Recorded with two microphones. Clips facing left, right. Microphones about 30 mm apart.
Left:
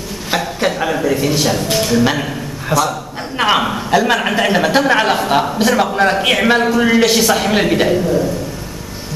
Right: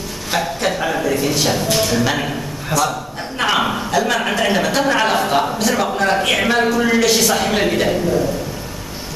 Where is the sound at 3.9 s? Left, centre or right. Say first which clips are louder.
Left 4 dB; centre.